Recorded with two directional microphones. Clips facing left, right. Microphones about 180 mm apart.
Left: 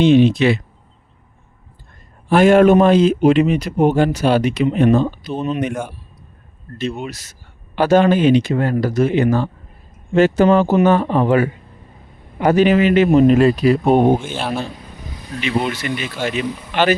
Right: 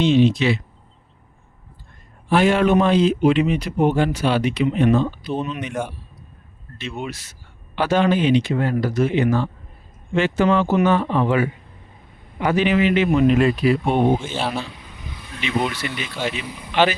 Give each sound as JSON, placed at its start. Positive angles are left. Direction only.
{"t": 0.0, "sound": "speech", "side_deg": 55}
{"t": 2.3, "sound": "speech", "side_deg": 50}
{"t": 7.0, "sound": "speech", "side_deg": 40}
{"t": 14.6, "sound": "vehicle", "side_deg": 40}
{"t": 15.8, "sound": "speech", "side_deg": 50}